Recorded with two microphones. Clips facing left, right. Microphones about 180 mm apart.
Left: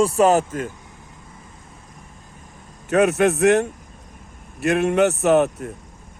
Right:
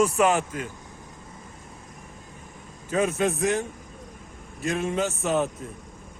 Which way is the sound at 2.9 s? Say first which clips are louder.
Left 7 dB; 70° left (ahead or behind).